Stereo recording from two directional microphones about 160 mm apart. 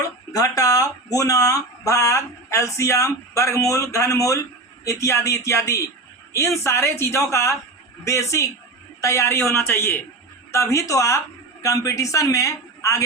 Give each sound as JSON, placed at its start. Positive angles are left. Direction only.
{"t": 0.3, "sound": "speech", "side_deg": 20}